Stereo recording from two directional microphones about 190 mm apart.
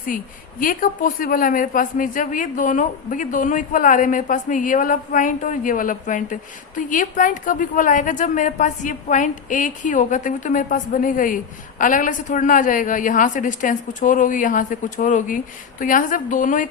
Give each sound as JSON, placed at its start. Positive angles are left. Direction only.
{"t": 0.6, "sound": "a woman's voice", "side_deg": 45}